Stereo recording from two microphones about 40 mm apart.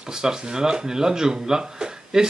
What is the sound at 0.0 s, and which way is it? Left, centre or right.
Speech, centre.